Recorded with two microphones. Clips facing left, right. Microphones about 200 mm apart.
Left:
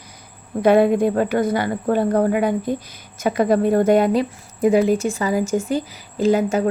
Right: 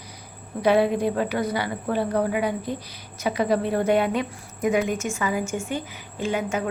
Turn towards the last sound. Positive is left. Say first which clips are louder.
# left 8 dB
turn(degrees=40)  # may be behind; listen again after turning